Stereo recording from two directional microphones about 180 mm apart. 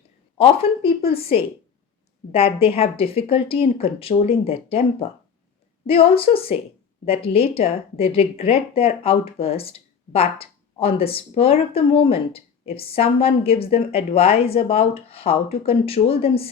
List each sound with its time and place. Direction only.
0.3 s speech: 30° left (ahead or behind)